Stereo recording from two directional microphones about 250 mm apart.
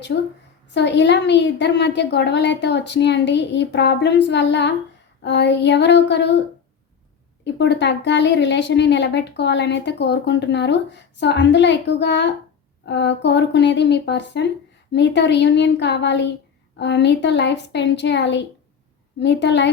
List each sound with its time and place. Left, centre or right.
0.7 s speech: left
7.4 s speech: left